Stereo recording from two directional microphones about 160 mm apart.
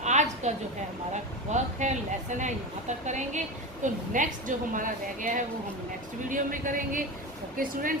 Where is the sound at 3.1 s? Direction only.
50° right (ahead or behind).